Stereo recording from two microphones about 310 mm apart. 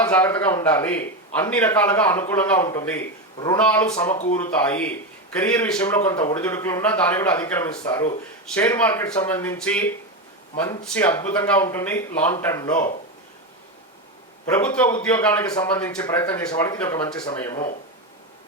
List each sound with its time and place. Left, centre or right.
0.0 s a man's voice: centre
14.4 s a man's voice: centre